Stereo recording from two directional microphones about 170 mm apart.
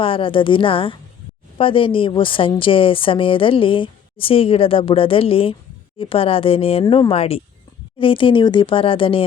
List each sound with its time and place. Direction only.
0.0 s a woman's voice: 30° left (ahead or behind)
6.8 s speech: 20° left (ahead or behind)
7.1 s a woman's voice: 35° left (ahead or behind)